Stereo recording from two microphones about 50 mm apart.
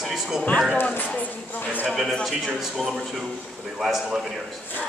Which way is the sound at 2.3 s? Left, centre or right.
Centre.